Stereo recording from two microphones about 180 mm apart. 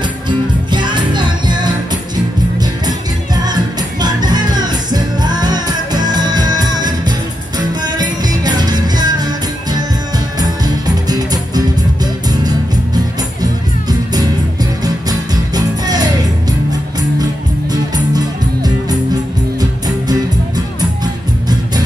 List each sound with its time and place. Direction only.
0.0 s music: 25° right (ahead or behind)